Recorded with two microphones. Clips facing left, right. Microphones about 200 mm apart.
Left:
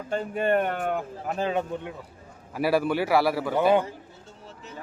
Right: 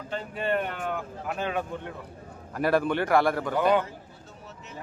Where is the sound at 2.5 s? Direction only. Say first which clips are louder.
Left 1 dB; 5° left (ahead or behind).